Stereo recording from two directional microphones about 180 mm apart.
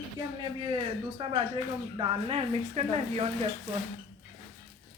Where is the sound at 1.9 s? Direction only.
35° right (ahead or behind).